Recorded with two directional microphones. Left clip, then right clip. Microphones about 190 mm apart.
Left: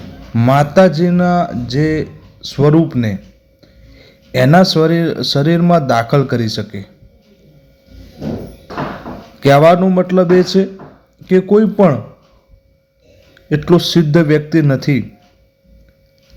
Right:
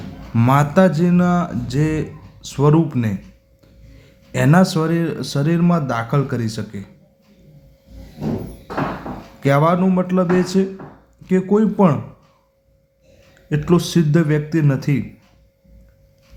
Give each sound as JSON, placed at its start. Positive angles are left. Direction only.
{"t": 0.3, "sound": "speech", "side_deg": 10}
{"t": 9.4, "sound": "a man's voice", "side_deg": 25}
{"t": 13.5, "sound": "speech", "side_deg": 15}